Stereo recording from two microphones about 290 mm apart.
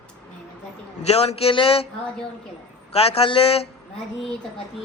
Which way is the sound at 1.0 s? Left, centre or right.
Left.